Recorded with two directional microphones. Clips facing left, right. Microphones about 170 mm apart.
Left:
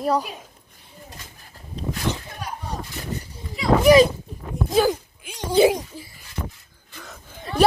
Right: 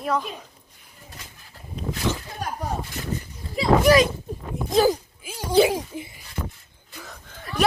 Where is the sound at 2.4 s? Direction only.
45° right (ahead or behind).